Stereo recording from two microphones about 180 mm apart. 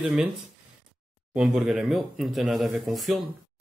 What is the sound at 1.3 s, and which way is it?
Speech, 5° right (ahead or behind).